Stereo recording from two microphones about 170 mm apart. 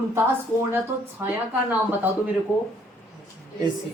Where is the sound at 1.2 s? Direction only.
10° right (ahead or behind).